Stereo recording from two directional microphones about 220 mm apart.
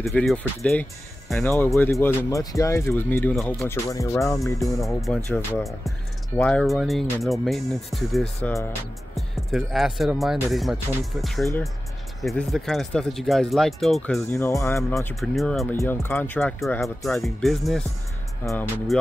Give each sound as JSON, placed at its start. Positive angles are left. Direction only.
{"t": 0.0, "sound": "speech", "side_deg": 0}
{"t": 4.8, "sound": "speech", "side_deg": 0}
{"t": 15.7, "sound": "speech", "side_deg": 10}